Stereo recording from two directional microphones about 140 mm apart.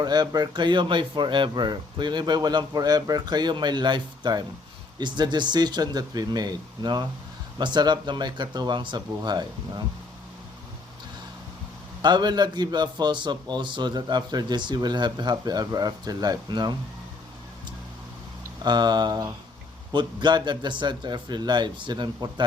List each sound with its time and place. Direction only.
0.0 s a man's voice: 30° right (ahead or behind)
12.0 s a man's voice: 30° right (ahead or behind)
18.6 s a man's voice: 30° right (ahead or behind)